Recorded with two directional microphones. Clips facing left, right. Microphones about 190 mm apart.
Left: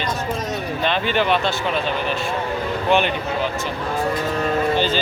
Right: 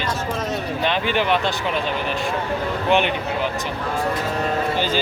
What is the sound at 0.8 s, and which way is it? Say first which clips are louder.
Speech: left 1 dB; 15° right (ahead or behind).